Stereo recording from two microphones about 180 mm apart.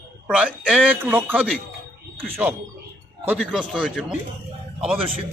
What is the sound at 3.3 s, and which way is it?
Speech, 5° right (ahead or behind).